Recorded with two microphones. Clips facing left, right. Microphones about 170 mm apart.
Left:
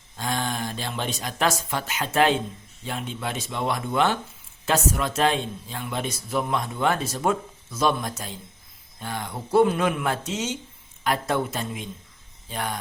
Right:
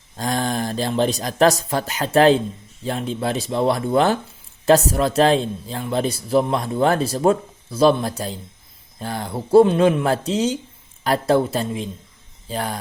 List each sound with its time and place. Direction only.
0.2 s a man's voice: 35° right (ahead or behind)